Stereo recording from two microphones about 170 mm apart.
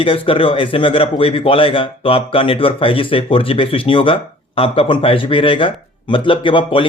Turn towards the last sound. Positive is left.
turn(degrees=30)  # may be behind; listen again after turning